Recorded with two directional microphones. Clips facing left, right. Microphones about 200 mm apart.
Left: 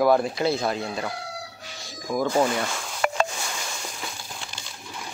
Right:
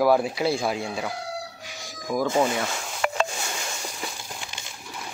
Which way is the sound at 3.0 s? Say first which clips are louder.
Left 1 dB; 45° left (ahead or behind).